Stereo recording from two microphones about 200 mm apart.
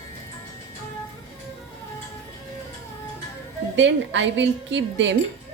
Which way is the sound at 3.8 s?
65° right (ahead or behind).